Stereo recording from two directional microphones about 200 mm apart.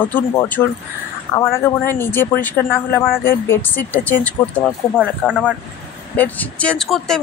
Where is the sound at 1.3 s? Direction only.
20° left (ahead or behind).